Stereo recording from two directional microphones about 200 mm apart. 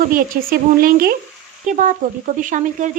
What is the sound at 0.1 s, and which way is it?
A woman's voice, 45° right (ahead or behind).